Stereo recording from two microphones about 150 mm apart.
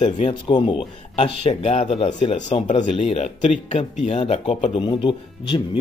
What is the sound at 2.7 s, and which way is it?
Speech, 30° left (ahead or behind).